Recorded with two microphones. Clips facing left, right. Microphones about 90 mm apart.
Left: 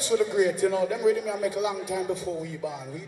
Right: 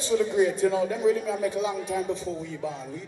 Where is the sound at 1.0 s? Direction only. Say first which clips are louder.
Even; 15° left (ahead or behind).